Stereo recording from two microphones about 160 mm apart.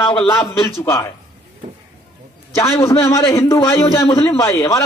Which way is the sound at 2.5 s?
15° left (ahead or behind).